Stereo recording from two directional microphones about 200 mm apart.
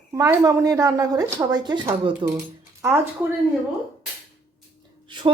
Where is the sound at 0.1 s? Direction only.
15° right (ahead or behind).